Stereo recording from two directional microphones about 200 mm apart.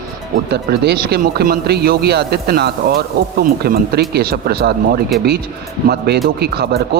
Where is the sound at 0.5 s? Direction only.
55° right (ahead or behind).